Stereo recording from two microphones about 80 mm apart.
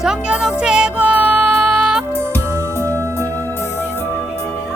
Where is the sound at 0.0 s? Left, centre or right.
Centre.